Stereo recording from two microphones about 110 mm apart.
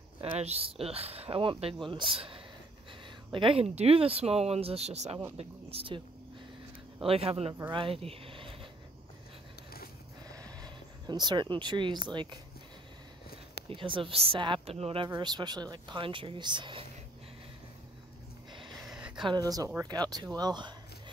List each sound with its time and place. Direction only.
0.2 s speech: 70° right (ahead or behind); by 3.6 s 50° right (ahead or behind)
3.6 s speech: 70° right (ahead or behind)
5.4 s speech: 60° right (ahead or behind)
7.1 s speech: 65° right (ahead or behind)
10.3 s speech: 35° right (ahead or behind)
13.7 s speech: 50° right (ahead or behind)
14.8 s speech: 60° right (ahead or behind)
15.0 s speech: 40° right (ahead or behind)
18.9 s a sound: 5° right (ahead or behind)
19.2 s speech: 35° right (ahead or behind)